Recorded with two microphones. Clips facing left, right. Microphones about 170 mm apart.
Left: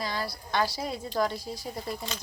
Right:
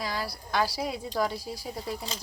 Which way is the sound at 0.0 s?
5° right (ahead or behind).